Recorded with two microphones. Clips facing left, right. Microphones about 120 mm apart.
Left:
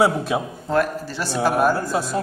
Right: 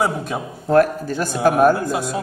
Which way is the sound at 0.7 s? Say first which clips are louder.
Right 7 dB; 50° right (ahead or behind).